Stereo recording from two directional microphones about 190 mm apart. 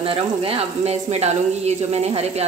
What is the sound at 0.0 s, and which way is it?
Speech, 30° right (ahead or behind).